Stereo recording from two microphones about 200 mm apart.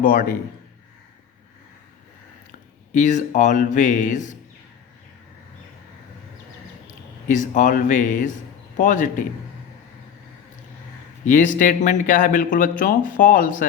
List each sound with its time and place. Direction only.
0.0 s a man's voice: 45° left (ahead or behind)
2.9 s speech: 40° left (ahead or behind)
7.3 s speech: 40° left (ahead or behind)
11.3 s speech: 40° left (ahead or behind)